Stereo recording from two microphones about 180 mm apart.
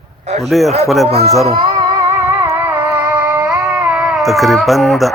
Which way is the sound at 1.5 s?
25° right (ahead or behind).